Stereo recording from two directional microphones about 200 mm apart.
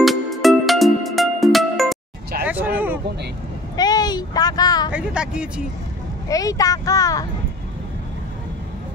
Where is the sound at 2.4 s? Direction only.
10° right (ahead or behind).